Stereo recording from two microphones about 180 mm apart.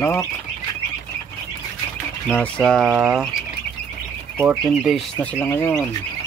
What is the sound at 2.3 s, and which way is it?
Speech, 5° left (ahead or behind).